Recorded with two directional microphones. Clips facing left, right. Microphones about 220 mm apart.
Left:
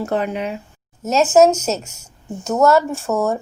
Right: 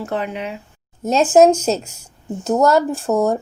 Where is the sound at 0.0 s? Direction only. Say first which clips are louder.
Left 3 dB; 45° left (ahead or behind).